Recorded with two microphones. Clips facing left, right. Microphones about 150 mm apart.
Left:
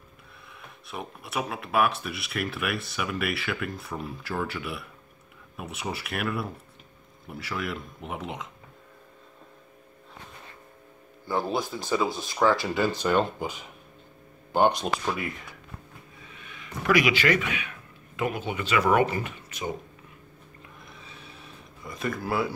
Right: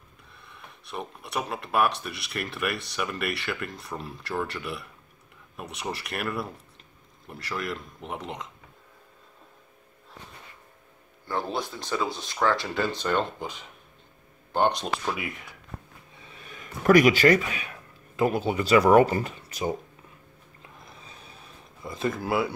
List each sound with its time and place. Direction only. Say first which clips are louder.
0.5 s speech: right 1 dB; centre (ahead or behind)
11.2 s speech: left 2 dB; 5° left (ahead or behind)
16.3 s a man's voice: right 2 dB; 40° right (ahead or behind)
21.1 s a sound: left 1 dB; 40° right (ahead or behind)
21.8 s speech: right 2 dB; 25° right (ahead or behind)